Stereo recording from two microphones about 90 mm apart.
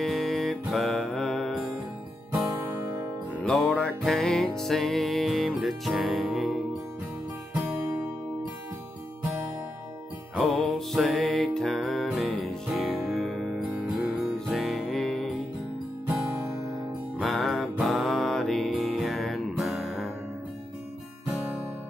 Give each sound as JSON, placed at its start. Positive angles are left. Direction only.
{"t": 0.0, "sound": "music", "side_deg": 5}
{"t": 2.3, "sound": "music", "side_deg": -20}
{"t": 3.7, "sound": "music", "side_deg": 5}
{"t": 10.3, "sound": "music", "side_deg": 0}
{"t": 17.2, "sound": "music", "side_deg": 0}